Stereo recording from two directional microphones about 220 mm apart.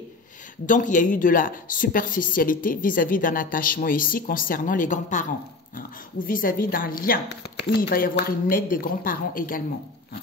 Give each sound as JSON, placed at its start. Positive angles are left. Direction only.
{"t": 0.7, "sound": "a woman's voice", "side_deg": 35}